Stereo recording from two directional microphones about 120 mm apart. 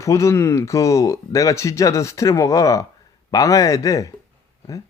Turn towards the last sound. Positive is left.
turn(degrees=30)  # may be behind; listen again after turning